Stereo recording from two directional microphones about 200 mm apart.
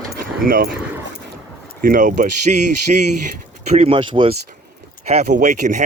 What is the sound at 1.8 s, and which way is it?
Speech, 45° right (ahead or behind).